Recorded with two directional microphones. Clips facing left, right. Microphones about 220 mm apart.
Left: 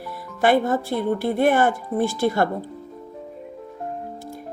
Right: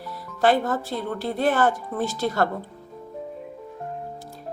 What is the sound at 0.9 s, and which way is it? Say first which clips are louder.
A woman's voice: left 6 dB; 15° left (ahead or behind).